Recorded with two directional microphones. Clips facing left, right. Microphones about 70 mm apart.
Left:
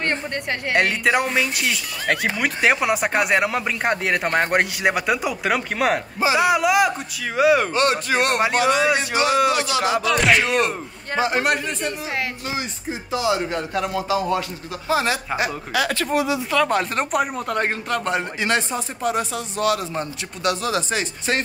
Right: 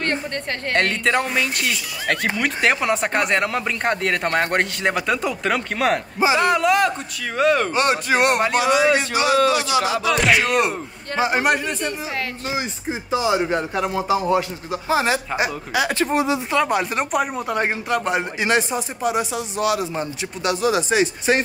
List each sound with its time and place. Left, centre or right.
0.0 s speech: centre
7.7 s a man's voice: right
9.1 s speech: left
10.1 s speech: centre
11.1 s speech: centre
11.4 s speech: centre
13.1 s speech: right
16.6 s a man's voice: centre